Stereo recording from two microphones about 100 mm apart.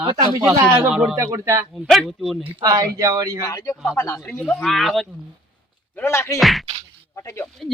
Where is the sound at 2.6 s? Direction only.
35° right (ahead or behind).